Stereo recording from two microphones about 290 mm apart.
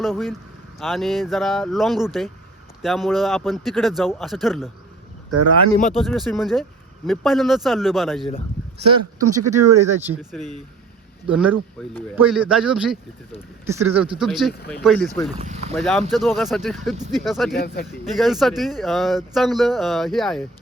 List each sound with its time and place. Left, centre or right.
0.0 s speech: centre
5.3 s speech: right
6.0 s speech: centre
8.9 s speech: centre
15.4 s speech: right
15.7 s speech: centre
17.5 s speech: left
18.0 s speech: centre